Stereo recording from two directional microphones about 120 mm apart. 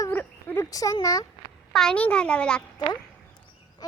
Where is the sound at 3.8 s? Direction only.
30° left (ahead or behind).